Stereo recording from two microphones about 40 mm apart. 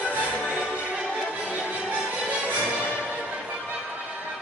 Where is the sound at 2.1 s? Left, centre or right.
Right.